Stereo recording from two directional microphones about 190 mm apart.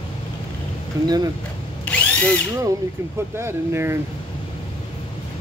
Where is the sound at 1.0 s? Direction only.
20° right (ahead or behind).